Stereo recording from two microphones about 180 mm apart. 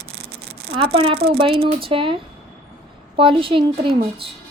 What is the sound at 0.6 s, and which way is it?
Speech, 35° right (ahead or behind).